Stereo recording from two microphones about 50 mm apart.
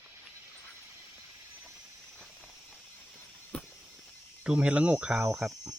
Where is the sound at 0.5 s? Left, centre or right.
Left.